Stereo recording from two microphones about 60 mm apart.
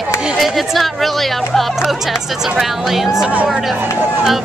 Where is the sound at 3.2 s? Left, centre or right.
Centre.